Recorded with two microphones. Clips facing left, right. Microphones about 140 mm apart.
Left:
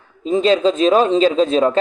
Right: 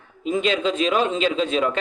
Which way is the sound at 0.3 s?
35° left (ahead or behind).